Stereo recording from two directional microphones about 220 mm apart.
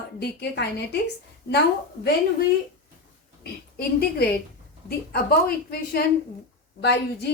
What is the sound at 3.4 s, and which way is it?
Speech, 45° left (ahead or behind).